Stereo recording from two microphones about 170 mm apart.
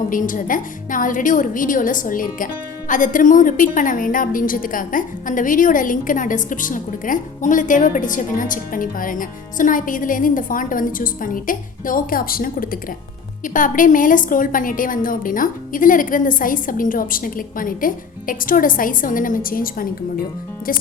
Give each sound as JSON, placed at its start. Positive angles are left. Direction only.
{"t": 0.1, "sound": "a woman's voice", "side_deg": 50}